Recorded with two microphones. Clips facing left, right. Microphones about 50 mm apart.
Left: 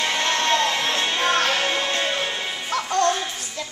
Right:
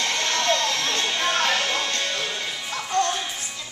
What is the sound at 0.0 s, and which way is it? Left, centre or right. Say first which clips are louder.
Music: left 2 dB; centre.